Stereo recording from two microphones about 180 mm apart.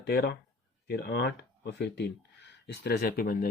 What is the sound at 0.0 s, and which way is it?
Speech, 60° left (ahead or behind).